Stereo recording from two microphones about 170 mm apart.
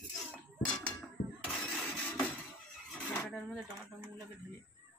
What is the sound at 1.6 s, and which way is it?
Printer, 5° left (ahead or behind).